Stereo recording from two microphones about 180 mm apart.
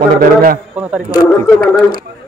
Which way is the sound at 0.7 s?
5° right (ahead or behind).